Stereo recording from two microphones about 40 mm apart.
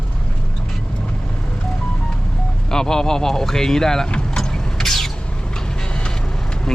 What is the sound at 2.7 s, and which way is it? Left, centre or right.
Speech, centre.